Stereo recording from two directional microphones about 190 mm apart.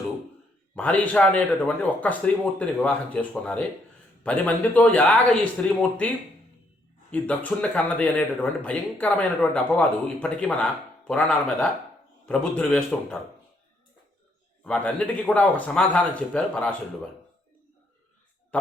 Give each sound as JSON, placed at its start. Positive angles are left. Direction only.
{"t": 0.8, "sound": "a man's voice", "side_deg": 10}
{"t": 14.6, "sound": "speech", "side_deg": 5}